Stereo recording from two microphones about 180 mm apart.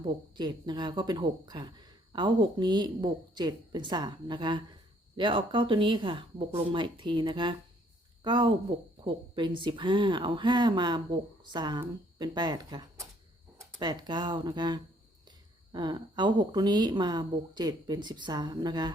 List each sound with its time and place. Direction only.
0.0 s speech: 25° right (ahead or behind)